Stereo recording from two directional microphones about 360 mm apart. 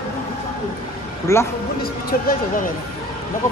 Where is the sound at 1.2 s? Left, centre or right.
Centre.